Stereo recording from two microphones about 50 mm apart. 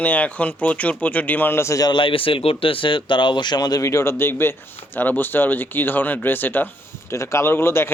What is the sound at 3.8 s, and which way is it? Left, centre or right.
Speech, left.